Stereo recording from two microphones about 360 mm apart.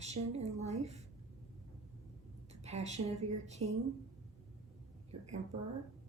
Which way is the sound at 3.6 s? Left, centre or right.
Right.